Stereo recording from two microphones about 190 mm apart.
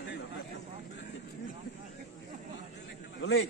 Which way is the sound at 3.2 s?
90° left.